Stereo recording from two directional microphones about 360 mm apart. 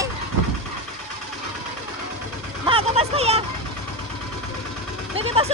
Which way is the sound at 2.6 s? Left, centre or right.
Centre.